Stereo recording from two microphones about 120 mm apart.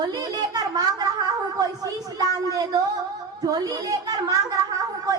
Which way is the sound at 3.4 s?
35° right (ahead or behind).